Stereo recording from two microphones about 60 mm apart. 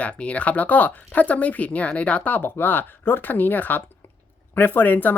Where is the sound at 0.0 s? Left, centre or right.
Left.